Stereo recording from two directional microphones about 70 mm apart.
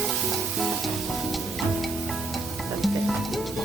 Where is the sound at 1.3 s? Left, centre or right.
Centre.